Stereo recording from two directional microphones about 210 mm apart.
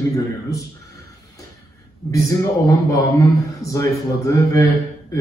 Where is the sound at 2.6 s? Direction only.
15° left (ahead or behind).